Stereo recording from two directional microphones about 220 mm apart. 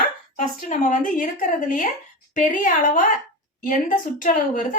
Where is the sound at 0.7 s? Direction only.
35° left (ahead or behind).